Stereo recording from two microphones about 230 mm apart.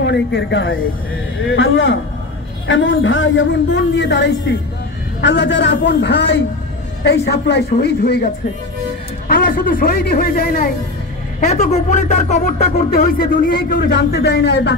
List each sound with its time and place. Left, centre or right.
0.0 s a woman's voice: left
9.3 s speech: left